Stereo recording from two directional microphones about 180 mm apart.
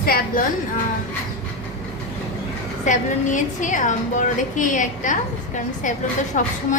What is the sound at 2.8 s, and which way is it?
A woman's voice, 45° left (ahead or behind).